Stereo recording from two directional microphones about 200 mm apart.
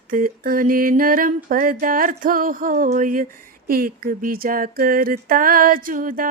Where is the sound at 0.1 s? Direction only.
45° right (ahead or behind).